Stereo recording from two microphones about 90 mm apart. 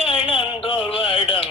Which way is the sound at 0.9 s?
80° left.